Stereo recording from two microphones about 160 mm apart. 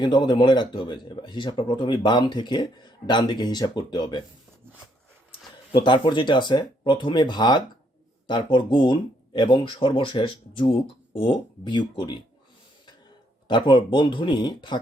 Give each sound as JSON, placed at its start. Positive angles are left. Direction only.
{"t": 0.0, "sound": "speech", "side_deg": 30}
{"t": 5.7, "sound": "speech", "side_deg": 30}
{"t": 13.5, "sound": "speech", "side_deg": 30}